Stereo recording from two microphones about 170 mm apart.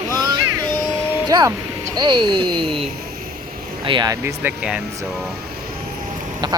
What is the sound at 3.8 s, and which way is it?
Speech, 25° right (ahead or behind).